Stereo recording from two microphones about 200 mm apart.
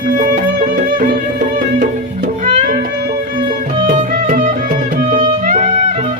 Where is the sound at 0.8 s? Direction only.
45° right (ahead or behind).